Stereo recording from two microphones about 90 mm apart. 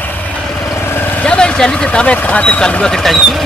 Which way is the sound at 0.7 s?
25° left (ahead or behind).